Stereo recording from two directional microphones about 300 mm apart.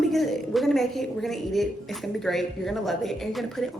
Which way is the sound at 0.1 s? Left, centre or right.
Centre.